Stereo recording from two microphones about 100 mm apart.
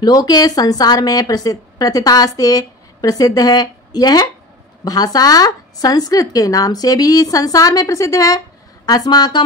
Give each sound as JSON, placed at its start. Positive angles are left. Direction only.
{"t": 0.0, "sound": "a woman's voice", "side_deg": 40}